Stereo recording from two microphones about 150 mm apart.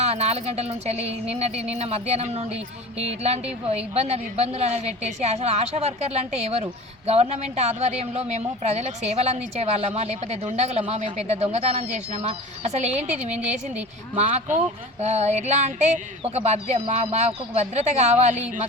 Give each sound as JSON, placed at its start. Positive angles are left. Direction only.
{"t": 0.0, "sound": "a woman's voice", "side_deg": -45}